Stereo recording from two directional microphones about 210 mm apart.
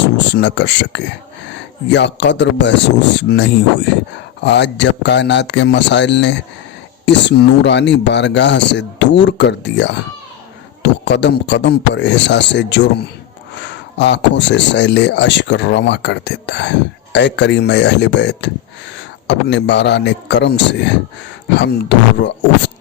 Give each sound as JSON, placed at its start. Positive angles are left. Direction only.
{"t": 0.3, "sound": "speech", "side_deg": 55}